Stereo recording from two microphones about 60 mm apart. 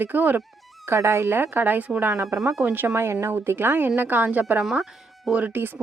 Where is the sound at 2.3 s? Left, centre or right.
Right.